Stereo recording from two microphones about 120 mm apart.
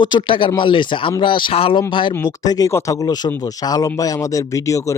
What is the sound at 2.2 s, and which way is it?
Speech, 35° left (ahead or behind).